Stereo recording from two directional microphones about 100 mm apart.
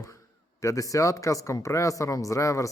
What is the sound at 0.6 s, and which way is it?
A man's voice, 35° left (ahead or behind).